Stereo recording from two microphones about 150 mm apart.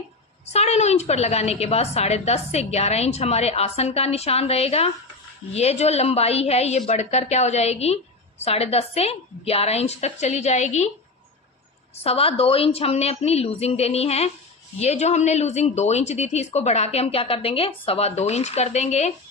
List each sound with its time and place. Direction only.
0.4 s a woman's voice: 45° left (ahead or behind)
12.0 s a woman's voice: 40° left (ahead or behind)